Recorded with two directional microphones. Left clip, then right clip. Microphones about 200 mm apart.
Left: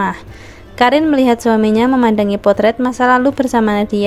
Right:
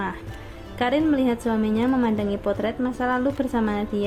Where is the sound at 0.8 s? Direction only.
45° left (ahead or behind).